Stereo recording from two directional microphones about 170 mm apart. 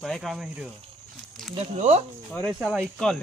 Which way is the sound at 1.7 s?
45° right (ahead or behind).